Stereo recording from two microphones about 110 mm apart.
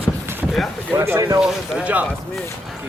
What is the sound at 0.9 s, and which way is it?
Speech, 25° right (ahead or behind).